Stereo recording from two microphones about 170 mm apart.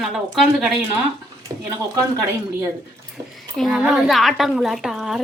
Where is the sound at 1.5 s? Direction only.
25° right (ahead or behind).